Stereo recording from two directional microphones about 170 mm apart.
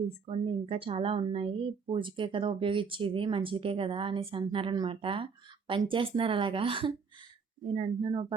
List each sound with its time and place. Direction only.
0.3 s speech: 35° right (ahead or behind)